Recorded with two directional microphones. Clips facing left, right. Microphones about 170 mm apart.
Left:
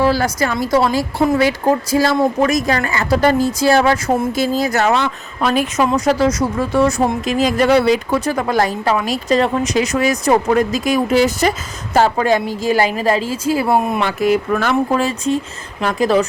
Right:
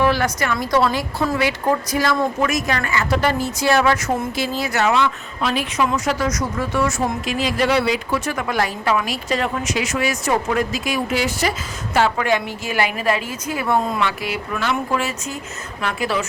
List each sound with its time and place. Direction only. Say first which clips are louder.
0.0 s a woman's voice: left 3 dB; 35° left (ahead or behind)
4.4 s a woman's voice: left 5 dB; 40° left (ahead or behind); by 14.0 s 20° left (ahead or behind)
14.0 s speech: left 8 dB; 40° left (ahead or behind)